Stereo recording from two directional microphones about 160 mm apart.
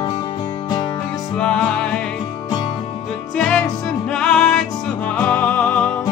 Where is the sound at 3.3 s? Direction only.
5° left (ahead or behind).